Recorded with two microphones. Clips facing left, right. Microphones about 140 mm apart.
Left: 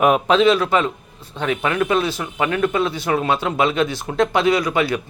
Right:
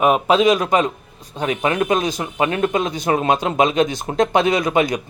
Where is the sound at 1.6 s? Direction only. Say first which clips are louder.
Right 1 dB; 40° right (ahead or behind).